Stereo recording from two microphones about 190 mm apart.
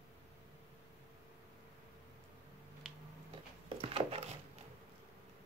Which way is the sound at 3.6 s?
30° right (ahead or behind).